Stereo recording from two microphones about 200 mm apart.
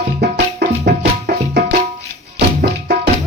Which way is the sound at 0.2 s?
55° right (ahead or behind).